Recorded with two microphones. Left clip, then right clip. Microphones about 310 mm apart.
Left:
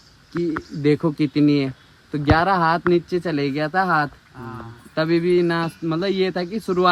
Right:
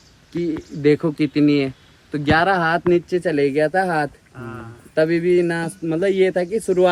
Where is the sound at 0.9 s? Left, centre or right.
Left.